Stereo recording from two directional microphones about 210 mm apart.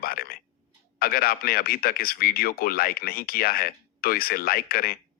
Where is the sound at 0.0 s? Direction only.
45° left (ahead or behind).